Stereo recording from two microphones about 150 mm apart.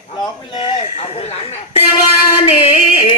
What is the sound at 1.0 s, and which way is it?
Music, 45° left (ahead or behind).